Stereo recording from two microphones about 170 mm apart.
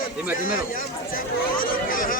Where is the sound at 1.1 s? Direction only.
55° left (ahead or behind).